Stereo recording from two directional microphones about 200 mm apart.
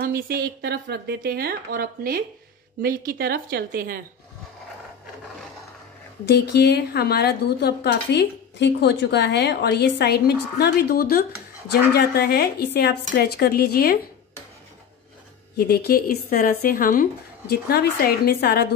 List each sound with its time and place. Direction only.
0.0 s speech: 45° right (ahead or behind)
6.2 s speech: 55° left (ahead or behind)
15.5 s speech: 55° left (ahead or behind)